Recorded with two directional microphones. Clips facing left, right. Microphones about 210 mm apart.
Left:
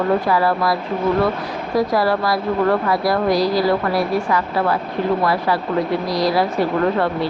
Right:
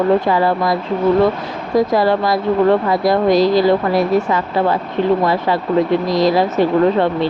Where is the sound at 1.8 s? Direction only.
20° right (ahead or behind).